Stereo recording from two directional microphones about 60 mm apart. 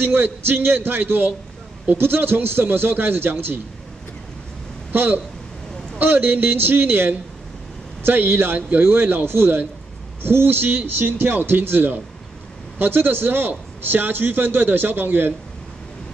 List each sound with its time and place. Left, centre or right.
0.0 s a man's voice: right
4.9 s a man's voice: right